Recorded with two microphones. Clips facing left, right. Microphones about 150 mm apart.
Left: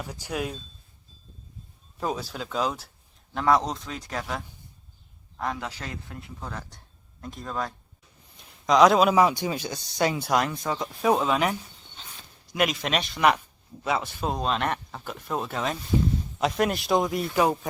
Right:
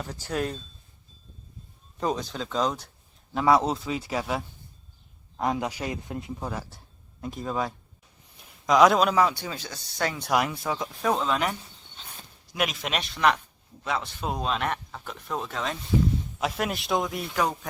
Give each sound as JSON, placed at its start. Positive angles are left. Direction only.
{"t": 0.0, "sound": "speech", "side_deg": 10}
{"t": 2.0, "sound": "speech", "side_deg": 5}
{"t": 5.4, "sound": "speech", "side_deg": -20}
{"t": 6.5, "sound": "speech", "side_deg": -5}
{"t": 10.3, "sound": "speech", "side_deg": -5}
{"t": 11.0, "sound": "speech", "side_deg": 10}